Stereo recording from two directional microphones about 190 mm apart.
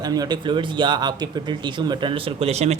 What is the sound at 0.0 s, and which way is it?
Speech, 20° right (ahead or behind).